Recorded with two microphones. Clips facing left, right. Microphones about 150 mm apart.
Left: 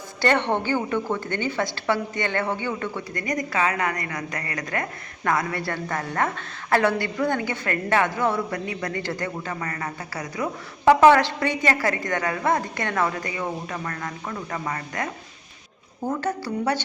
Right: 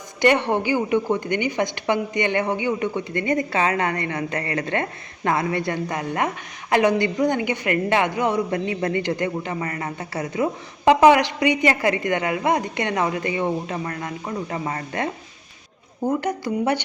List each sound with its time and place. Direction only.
0.2 s a woman's voice: 15° right (ahead or behind)